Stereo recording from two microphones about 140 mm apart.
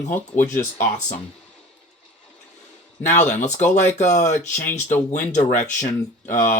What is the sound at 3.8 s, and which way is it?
Speech, 55° left (ahead or behind).